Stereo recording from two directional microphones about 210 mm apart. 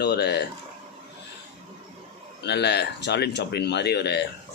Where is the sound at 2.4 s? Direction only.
50° left (ahead or behind).